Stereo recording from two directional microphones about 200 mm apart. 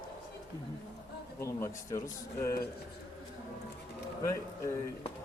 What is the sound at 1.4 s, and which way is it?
Speech, 15° left (ahead or behind).